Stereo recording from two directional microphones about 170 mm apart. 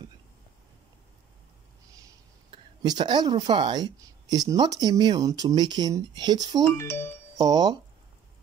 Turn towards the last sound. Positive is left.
turn(degrees=-25)  # may be behind; listen again after turning